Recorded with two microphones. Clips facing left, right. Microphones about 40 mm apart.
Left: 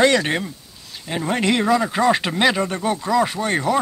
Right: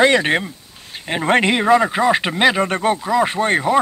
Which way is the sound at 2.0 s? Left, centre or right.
Centre.